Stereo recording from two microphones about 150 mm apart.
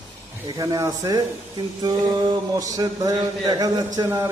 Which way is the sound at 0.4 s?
25° right (ahead or behind).